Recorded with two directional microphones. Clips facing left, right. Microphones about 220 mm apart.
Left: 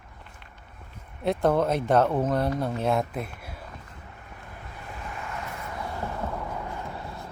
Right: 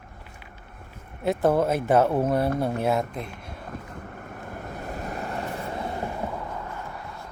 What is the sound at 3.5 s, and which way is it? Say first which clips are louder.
Vehicle: right 6 dB; 50° right (ahead or behind).